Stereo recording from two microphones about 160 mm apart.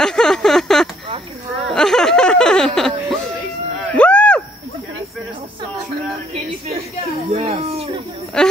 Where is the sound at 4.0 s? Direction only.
5° left (ahead or behind).